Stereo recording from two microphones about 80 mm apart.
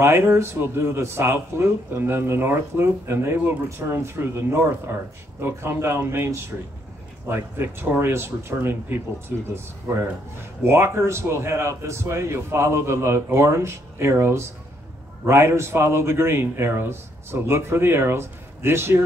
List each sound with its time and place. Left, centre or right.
0.0 s a man's voice: right